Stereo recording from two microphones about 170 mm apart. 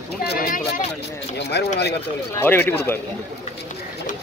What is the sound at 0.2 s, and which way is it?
Speech, 65° left (ahead or behind).